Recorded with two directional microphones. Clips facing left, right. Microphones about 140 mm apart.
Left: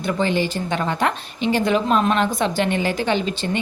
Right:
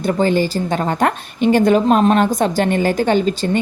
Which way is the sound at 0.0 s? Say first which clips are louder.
Right 5 dB; 40° right (ahead or behind).